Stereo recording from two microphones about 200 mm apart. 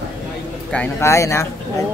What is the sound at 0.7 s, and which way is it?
Speech, 10° left (ahead or behind).